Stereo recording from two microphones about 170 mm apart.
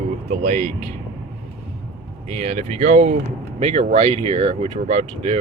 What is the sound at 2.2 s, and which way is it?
Speech, 40° right (ahead or behind).